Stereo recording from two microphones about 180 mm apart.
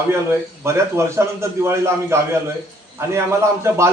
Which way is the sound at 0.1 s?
15° right (ahead or behind).